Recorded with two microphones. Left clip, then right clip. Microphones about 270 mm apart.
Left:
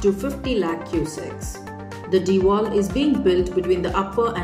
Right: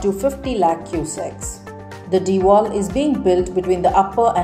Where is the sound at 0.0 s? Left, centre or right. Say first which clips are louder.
Right 3 dB; centre.